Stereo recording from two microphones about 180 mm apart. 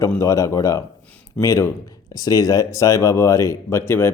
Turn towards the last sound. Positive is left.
turn(degrees=15)  # may be behind; listen again after turning